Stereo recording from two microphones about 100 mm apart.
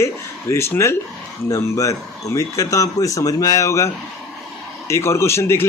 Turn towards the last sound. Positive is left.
turn(degrees=25)  # may be behind; listen again after turning